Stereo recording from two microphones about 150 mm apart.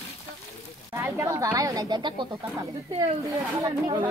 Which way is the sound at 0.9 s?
15° right (ahead or behind).